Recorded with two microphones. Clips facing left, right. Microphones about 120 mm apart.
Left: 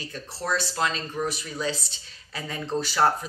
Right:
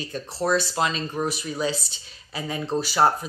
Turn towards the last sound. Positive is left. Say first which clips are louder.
# right 2 dB
turn(degrees=-10)  # may be behind; listen again after turning